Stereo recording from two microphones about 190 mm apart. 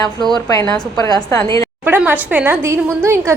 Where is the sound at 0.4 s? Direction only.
15° left (ahead or behind).